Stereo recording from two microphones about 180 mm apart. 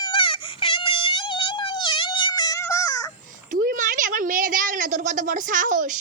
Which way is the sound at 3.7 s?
45° right (ahead or behind).